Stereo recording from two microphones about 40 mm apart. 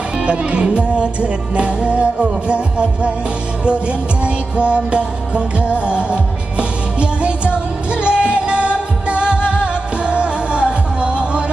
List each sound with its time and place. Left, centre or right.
0.2 s music: right